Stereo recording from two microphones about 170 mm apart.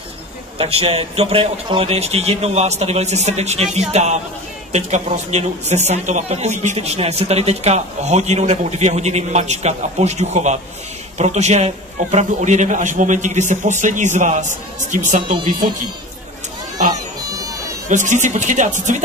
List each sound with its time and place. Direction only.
0.6 s a man's voice: 35° right (ahead or behind)
17.3 s music: 20° right (ahead or behind)
17.8 s a man's voice: 45° right (ahead or behind)